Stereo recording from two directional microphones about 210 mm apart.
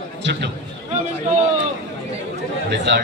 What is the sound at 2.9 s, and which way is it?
Speech, 60° right (ahead or behind).